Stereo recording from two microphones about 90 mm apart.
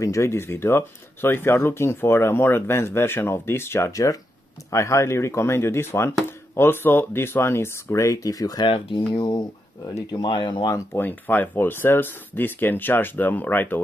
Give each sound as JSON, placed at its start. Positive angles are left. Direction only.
{"t": 0.0, "sound": "speech", "side_deg": 30}
{"t": 3.9, "sound": "speech", "side_deg": 40}
{"t": 10.1, "sound": "speech", "side_deg": 55}
{"t": 10.7, "sound": "speech", "side_deg": 25}